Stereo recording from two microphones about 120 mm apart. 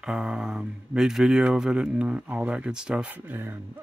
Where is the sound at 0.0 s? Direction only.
5° right (ahead or behind).